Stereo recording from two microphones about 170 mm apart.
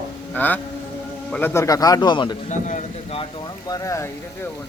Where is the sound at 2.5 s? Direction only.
45° left (ahead or behind).